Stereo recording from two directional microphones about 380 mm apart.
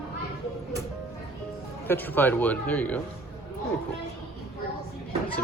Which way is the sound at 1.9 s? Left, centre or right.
Centre.